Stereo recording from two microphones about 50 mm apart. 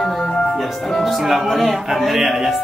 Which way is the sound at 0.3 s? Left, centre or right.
Centre.